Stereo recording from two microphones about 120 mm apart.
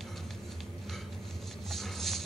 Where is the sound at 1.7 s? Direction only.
Centre (ahead or behind).